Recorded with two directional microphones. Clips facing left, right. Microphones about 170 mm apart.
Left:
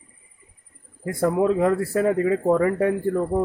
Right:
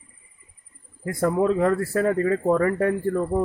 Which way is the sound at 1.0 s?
10° left (ahead or behind).